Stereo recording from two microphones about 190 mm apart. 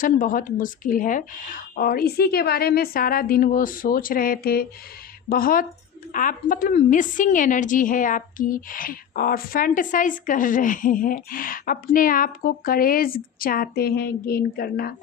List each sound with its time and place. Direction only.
0.0 s a woman's voice: 45° left (ahead or behind)